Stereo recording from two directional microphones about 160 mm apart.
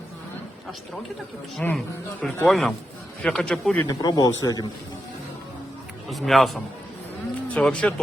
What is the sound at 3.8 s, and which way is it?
Speech, 25° left (ahead or behind).